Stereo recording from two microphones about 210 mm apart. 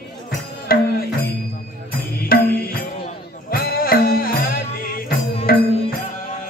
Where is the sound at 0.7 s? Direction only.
45° left (ahead or behind).